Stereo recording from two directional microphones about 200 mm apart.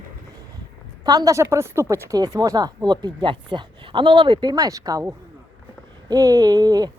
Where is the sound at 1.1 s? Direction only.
15° right (ahead or behind).